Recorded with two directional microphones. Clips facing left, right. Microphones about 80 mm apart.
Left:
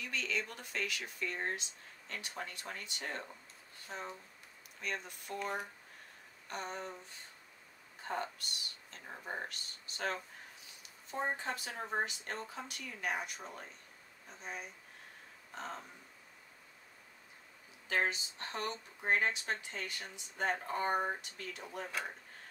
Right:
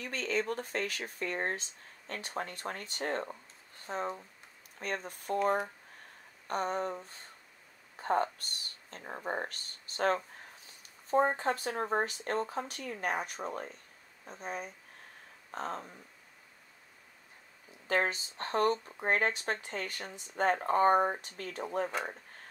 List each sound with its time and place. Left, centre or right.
0.0 s speech: right
17.8 s speech: right